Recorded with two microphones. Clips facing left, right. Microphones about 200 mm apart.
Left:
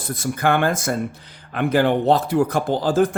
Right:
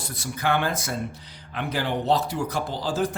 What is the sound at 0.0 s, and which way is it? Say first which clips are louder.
Speech: left 7 dB; 50° left (ahead or behind).